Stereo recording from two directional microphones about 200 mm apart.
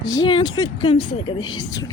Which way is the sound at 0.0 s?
20° left (ahead or behind).